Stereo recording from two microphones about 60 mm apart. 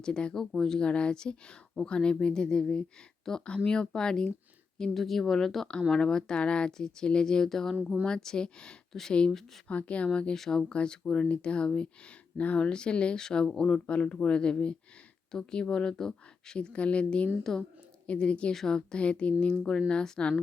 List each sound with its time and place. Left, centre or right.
0.0 s a woman's voice: centre
10.3 s a woman's voice: centre
10.7 s speech: centre